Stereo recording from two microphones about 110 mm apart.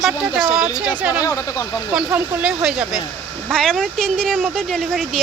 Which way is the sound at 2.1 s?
10° right (ahead or behind).